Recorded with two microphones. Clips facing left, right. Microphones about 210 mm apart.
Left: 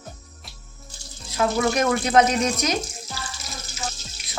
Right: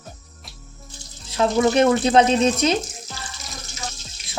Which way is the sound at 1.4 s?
30° right (ahead or behind).